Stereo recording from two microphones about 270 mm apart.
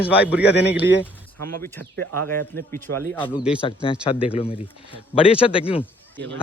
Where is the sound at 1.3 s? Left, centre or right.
Right.